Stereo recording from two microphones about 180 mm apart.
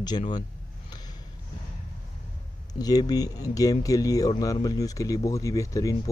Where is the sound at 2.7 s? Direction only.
20° left (ahead or behind).